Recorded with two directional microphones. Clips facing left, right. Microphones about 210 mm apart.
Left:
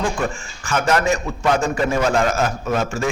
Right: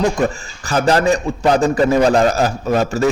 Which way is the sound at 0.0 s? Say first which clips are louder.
Right 6 dB; 40° right (ahead or behind).